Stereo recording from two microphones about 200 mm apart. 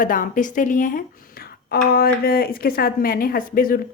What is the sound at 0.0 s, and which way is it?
A woman's voice, 40° left (ahead or behind).